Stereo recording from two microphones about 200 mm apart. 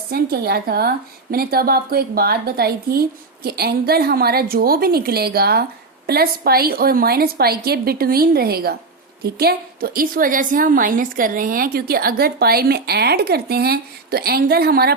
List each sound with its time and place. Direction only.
0.1 s a woman's voice: 50° right (ahead or behind)